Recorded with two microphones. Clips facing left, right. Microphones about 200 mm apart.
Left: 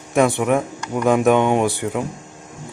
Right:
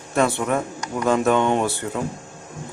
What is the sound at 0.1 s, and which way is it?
Speech, 15° left (ahead or behind).